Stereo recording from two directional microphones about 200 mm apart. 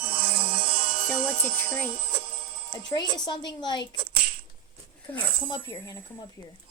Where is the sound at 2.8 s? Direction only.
20° left (ahead or behind).